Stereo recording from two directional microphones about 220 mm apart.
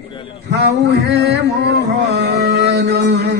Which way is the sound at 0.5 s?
50° right (ahead or behind).